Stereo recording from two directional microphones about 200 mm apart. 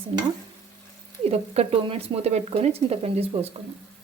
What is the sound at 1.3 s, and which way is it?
Speech, 30° right (ahead or behind).